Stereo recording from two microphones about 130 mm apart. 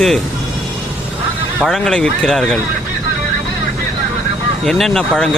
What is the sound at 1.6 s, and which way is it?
Speech, 5° left (ahead or behind).